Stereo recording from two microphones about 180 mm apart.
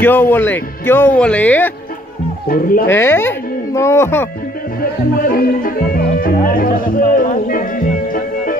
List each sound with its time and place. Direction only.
0.0 s speech: 10° left (ahead or behind)
2.4 s speech: 55° left (ahead or behind)
2.9 s speech: 15° left (ahead or behind)
5.3 s speech: 50° left (ahead or behind)